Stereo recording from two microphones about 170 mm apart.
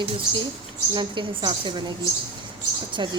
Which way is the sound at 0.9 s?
25° right (ahead or behind).